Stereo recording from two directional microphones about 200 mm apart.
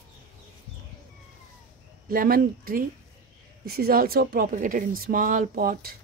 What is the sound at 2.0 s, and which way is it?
Speech, 45° right (ahead or behind).